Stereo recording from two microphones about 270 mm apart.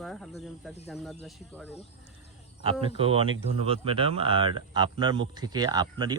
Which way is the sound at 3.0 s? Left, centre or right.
Centre.